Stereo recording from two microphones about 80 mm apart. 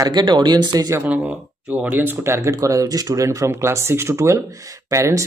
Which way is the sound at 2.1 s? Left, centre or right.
Right.